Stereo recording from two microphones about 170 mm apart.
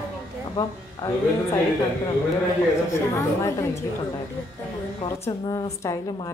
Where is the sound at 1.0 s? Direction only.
20° left (ahead or behind).